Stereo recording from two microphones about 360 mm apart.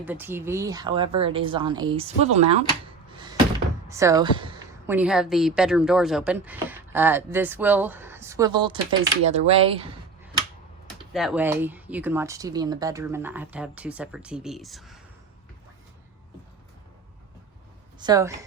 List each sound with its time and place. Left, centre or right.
0.0 s speech: centre
3.8 s a woman's voice: centre
11.1 s speech: centre
18.0 s speech: centre